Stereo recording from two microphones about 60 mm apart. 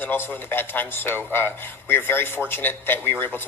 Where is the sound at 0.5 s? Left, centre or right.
Left.